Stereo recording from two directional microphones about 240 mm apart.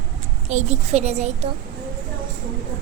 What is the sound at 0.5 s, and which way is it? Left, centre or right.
Speech, right.